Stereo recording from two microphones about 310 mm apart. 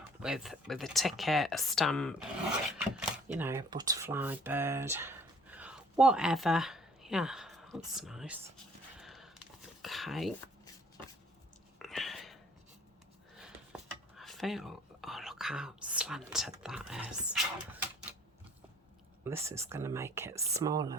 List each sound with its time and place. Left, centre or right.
0.2 s speech: centre
9.0 s a sound: centre
11.8 s whispering: centre
13.4 s whispering: centre
19.2 s speech: centre